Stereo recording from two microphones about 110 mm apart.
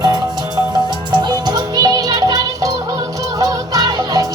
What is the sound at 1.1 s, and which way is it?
Music, 40° right (ahead or behind).